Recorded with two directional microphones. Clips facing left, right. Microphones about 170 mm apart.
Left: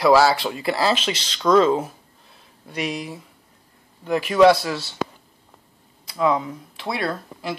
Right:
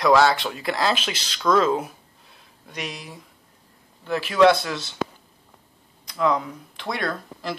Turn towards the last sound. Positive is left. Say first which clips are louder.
# left 2 dB
turn(degrees=5)  # may be behind; listen again after turning